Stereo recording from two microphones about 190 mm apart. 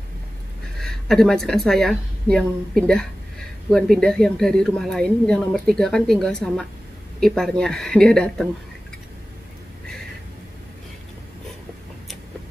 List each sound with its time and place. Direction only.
0.7 s a woman's voice: centre (ahead or behind)